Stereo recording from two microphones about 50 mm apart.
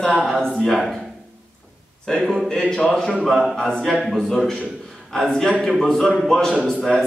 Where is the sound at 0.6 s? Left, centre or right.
Centre.